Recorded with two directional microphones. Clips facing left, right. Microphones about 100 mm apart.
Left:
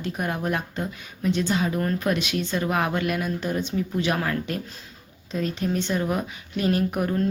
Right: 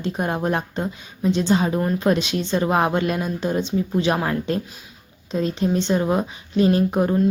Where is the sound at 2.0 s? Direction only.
25° right (ahead or behind).